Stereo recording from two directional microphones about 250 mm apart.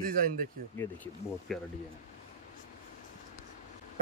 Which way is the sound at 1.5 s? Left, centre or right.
Centre.